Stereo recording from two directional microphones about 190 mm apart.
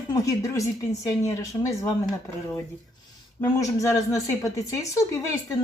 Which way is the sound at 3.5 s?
15° left (ahead or behind).